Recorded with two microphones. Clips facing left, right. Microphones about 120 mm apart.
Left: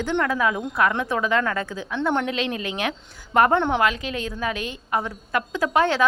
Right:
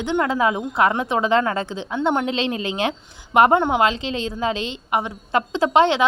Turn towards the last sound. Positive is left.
turn(degrees=-20)  # may be behind; listen again after turning